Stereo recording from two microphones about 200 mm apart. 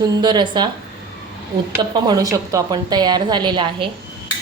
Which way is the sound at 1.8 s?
20° right (ahead or behind).